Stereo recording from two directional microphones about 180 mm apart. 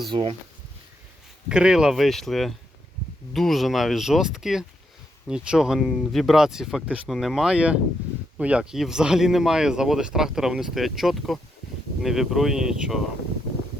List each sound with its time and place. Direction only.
0.1 s speech: 30° right (ahead or behind)
1.5 s speech: 5° right (ahead or behind)